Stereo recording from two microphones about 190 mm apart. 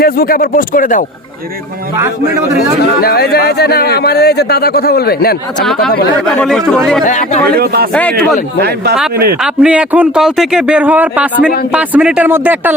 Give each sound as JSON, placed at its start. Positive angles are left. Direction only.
{"t": 0.0, "sound": "speech", "side_deg": 50}
{"t": 2.0, "sound": "a man's voice", "side_deg": -15}
{"t": 3.0, "sound": "speech", "side_deg": 55}
{"t": 6.1, "sound": "speech", "side_deg": 5}
{"t": 7.0, "sound": "speech", "side_deg": 40}
{"t": 7.6, "sound": "speech", "side_deg": -55}
{"t": 9.4, "sound": "a man's voice", "side_deg": -5}